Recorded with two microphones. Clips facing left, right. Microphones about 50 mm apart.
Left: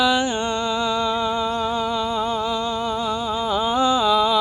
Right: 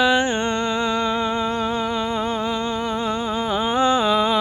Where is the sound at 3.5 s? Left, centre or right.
Right.